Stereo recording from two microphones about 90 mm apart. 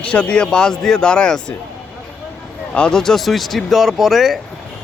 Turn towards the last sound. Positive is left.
turn(degrees=0)  # may be behind; listen again after turning